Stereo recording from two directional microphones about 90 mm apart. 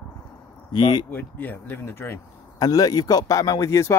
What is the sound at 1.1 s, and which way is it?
Speech, 20° left (ahead or behind).